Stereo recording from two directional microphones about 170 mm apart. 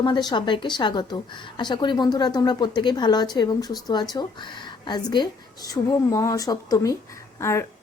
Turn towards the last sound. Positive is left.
turn(degrees=15)  # may be behind; listen again after turning